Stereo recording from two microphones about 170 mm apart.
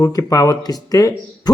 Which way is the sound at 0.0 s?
20° left (ahead or behind).